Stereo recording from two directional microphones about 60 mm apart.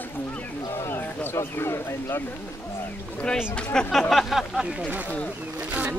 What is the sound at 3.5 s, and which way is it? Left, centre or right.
Speech, centre.